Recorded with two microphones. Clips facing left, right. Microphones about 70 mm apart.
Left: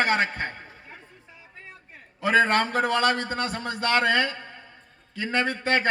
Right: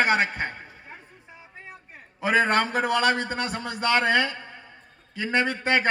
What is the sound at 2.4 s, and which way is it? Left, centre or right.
Speech, right.